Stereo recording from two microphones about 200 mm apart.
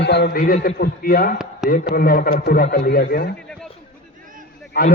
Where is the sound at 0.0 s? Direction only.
55° left (ahead or behind).